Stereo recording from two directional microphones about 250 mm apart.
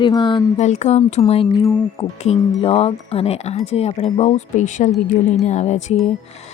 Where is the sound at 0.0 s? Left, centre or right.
Centre.